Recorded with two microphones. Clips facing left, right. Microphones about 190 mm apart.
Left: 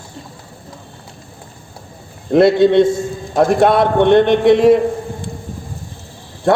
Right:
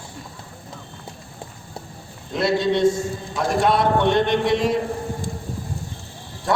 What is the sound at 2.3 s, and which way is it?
A man's voice, 55° left (ahead or behind).